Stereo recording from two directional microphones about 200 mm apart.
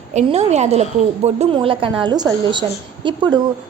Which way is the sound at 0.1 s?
35° right (ahead or behind).